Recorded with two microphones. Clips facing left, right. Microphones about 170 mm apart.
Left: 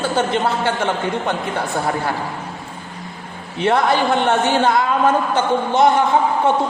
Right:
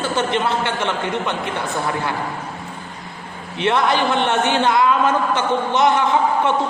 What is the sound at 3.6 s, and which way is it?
A woman's voice, 40° left (ahead or behind).